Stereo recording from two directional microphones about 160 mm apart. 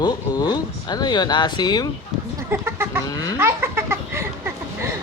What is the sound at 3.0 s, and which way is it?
Speech, 25° left (ahead or behind).